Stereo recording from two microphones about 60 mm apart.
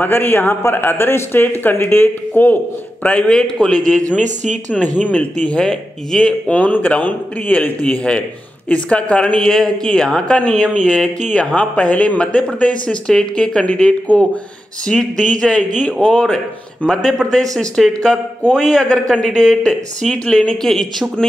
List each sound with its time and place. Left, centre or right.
0.0 s speech: left
3.3 s speech: centre
5.0 s speech: left
6.5 s speech: left
7.8 s speech: centre
11.5 s speech: left; by 21.3 s centre